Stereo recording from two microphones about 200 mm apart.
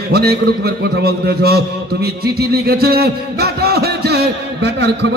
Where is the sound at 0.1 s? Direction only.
50° right (ahead or behind).